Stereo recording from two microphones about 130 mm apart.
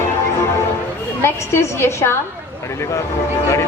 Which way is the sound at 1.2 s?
20° left (ahead or behind).